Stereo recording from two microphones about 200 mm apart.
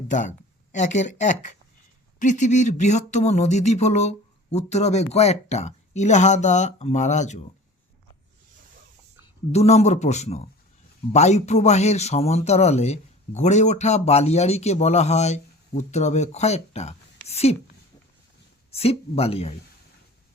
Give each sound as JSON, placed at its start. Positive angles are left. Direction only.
{"t": 0.1, "sound": "speech", "side_deg": 40}
{"t": 9.5, "sound": "speech", "side_deg": 30}
{"t": 18.7, "sound": "speech", "side_deg": 30}